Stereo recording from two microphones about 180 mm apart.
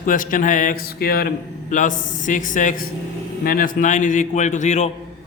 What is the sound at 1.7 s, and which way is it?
A man's voice, 45° left (ahead or behind).